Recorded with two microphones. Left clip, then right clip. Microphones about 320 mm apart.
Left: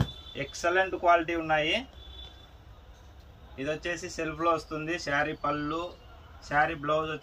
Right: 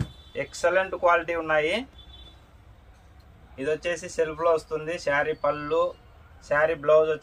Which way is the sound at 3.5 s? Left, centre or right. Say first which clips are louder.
Right 5 dB; right.